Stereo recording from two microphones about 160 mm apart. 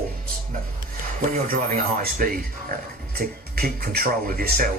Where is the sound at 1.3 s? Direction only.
60° right (ahead or behind).